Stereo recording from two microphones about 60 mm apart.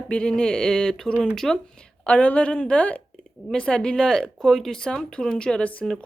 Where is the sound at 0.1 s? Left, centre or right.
Centre.